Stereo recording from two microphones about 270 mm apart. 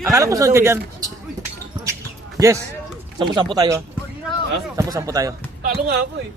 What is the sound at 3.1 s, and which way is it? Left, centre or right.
Speech, centre.